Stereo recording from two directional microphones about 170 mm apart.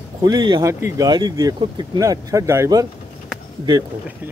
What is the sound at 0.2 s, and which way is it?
Speech, 25° right (ahead or behind).